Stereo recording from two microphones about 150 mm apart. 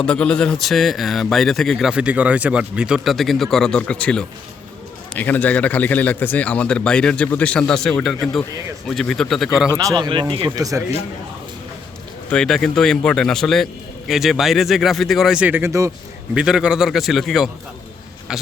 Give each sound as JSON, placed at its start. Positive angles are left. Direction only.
{"t": 0.0, "sound": "a man's voice", "side_deg": 5}
{"t": 9.7, "sound": "speech", "side_deg": -30}
{"t": 12.3, "sound": "a man's voice", "side_deg": 5}
{"t": 16.3, "sound": "a man's voice", "side_deg": -5}